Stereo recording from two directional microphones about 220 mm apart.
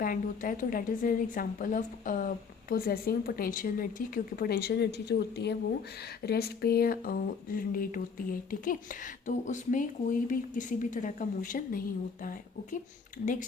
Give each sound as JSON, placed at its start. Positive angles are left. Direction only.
{"t": 0.0, "sound": "speech", "side_deg": 40}